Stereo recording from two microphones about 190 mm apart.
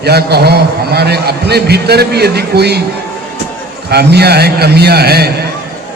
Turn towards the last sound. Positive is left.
turn(degrees=-55)  # may be behind; listen again after turning